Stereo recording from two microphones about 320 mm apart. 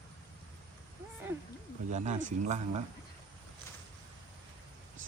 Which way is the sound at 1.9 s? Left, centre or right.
Right.